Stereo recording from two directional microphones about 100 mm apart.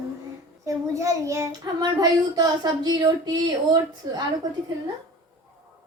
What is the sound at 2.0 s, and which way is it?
Speech, 45° right (ahead or behind).